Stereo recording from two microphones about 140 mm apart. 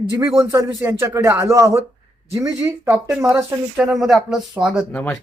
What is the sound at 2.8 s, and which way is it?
Speech, 20° right (ahead or behind).